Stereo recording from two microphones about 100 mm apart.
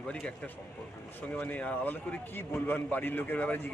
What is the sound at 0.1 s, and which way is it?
A man's voice, 10° left (ahead or behind).